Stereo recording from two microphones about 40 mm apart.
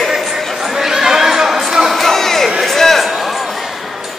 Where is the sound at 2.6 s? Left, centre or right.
Centre.